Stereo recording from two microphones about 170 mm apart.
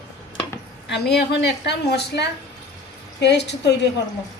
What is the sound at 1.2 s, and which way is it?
A woman's voice, 80° left.